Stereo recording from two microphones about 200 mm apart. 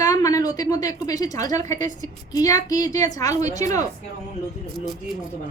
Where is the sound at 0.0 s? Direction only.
15° left (ahead or behind).